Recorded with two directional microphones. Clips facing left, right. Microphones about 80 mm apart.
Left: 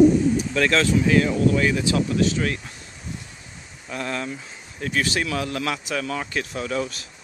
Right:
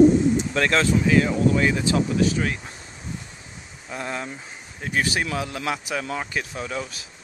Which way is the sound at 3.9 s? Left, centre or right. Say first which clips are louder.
Left 2 dB; centre.